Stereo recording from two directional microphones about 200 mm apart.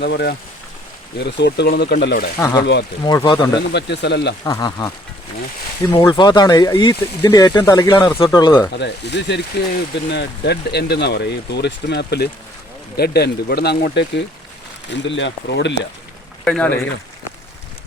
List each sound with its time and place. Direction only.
0.0 s speech: 55° left (ahead or behind)
2.4 s speech: 20° left (ahead or behind)
3.7 s speech: 55° left (ahead or behind)
4.4 s speech: 15° left (ahead or behind)
5.9 s speech: 10° left (ahead or behind)
8.8 s speech: 60° left (ahead or behind)
16.4 s speech: 5° left (ahead or behind)